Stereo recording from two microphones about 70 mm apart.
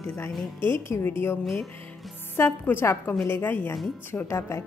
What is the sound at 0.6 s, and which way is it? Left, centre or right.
Speech, left.